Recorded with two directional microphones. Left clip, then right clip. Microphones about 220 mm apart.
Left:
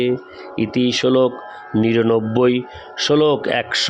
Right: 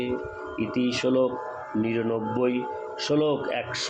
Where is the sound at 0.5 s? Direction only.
50° left (ahead or behind).